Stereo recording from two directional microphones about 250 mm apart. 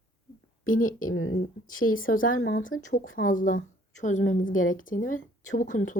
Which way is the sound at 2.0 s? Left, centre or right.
Left.